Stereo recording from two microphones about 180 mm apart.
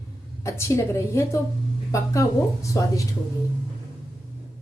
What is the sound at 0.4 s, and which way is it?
Speech, 15° left (ahead or behind).